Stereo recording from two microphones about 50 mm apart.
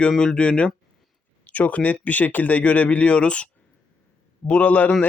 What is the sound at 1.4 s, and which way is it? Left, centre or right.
Speech, left.